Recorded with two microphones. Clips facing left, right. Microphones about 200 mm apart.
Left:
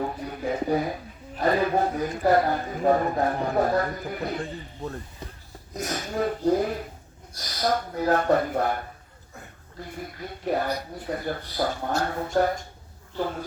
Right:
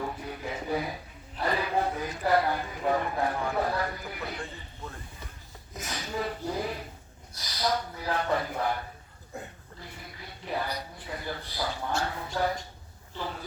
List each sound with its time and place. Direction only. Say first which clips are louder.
0.0 s a sound: left 6 dB; 45° left (ahead or behind)
1.4 s speech: left 6 dB; 45° left (ahead or behind)
9.8 s speech: left 9 dB; 45° left (ahead or behind)